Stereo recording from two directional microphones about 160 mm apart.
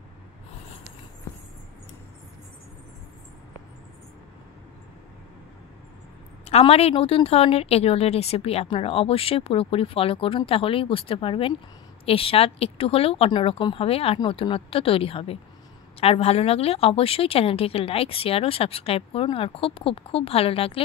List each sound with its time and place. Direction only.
6.5 s a woman's voice: 40° left (ahead or behind)